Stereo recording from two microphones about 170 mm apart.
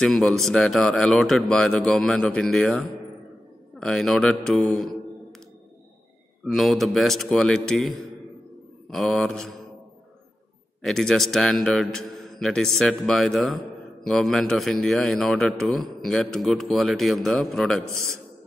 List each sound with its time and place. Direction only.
0.0 s a man's voice: 5° left (ahead or behind)
6.4 s a man's voice: centre (ahead or behind)
10.8 s a man's voice: centre (ahead or behind)